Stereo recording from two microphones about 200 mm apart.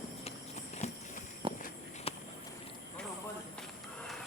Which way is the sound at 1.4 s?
25° right (ahead or behind).